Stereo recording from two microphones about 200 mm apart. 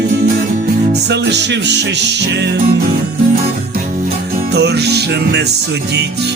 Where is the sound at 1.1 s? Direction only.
60° right (ahead or behind).